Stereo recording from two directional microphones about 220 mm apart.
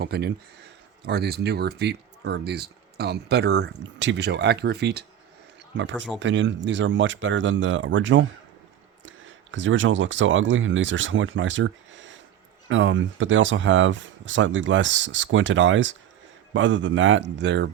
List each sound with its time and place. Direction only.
0.0 s speech: 50° right (ahead or behind)